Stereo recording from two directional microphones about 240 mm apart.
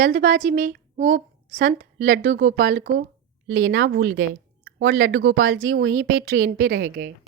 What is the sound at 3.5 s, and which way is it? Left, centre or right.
Speech, right.